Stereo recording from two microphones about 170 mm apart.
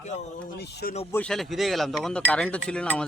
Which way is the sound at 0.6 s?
75° left (ahead or behind).